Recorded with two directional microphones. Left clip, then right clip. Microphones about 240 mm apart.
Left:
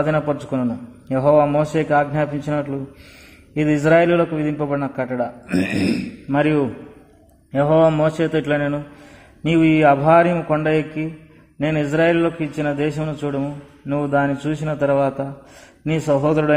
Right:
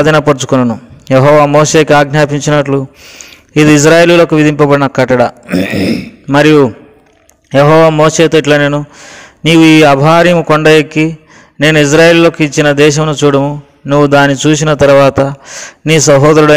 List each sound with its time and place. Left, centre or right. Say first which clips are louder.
0.0 s a man's voice: right 12 dB; right